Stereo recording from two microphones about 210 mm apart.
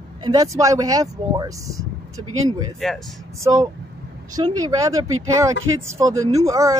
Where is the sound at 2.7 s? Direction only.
Centre (ahead or behind).